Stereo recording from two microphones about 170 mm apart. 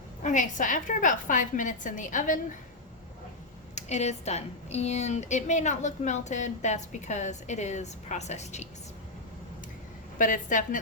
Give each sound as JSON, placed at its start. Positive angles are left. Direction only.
{"t": 0.2, "sound": "speech", "side_deg": 45}
{"t": 3.8, "sound": "speech", "side_deg": 40}
{"t": 10.2, "sound": "speech", "side_deg": 50}